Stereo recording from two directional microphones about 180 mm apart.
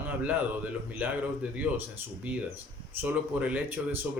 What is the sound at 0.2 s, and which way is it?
Speech, 10° right (ahead or behind).